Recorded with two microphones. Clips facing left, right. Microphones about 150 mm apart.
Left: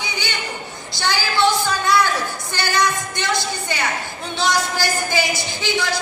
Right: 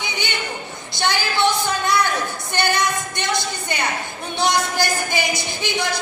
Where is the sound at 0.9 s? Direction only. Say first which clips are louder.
Left 1 dB; 20° right (ahead or behind).